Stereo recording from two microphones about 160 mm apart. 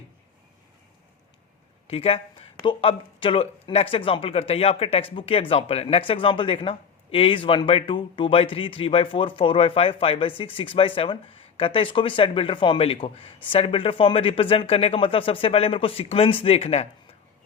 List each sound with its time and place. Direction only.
1.9 s speech: 35° left (ahead or behind)